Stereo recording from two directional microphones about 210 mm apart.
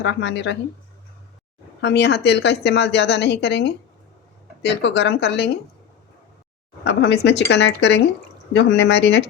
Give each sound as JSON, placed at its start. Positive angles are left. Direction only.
{"t": 0.0, "sound": "a woman's voice", "side_deg": 60}
{"t": 1.8, "sound": "a woman's voice", "side_deg": 55}
{"t": 6.8, "sound": "a woman's voice", "side_deg": 55}